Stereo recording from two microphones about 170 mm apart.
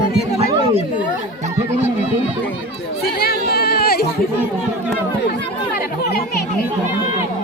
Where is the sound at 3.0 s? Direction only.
65° left (ahead or behind).